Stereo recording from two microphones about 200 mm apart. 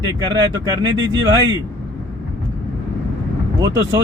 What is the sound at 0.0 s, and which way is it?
Speech, 20° right (ahead or behind).